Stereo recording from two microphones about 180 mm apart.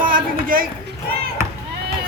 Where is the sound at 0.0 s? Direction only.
50° right (ahead or behind).